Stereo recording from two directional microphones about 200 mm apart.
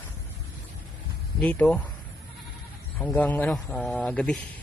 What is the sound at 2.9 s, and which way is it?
A man's voice, 5° left (ahead or behind).